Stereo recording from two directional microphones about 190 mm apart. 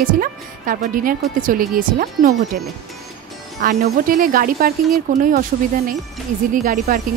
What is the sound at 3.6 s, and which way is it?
A woman's voice, 50° right (ahead or behind).